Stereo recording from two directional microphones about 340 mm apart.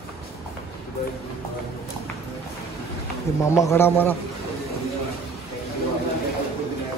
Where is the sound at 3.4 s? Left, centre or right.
Centre.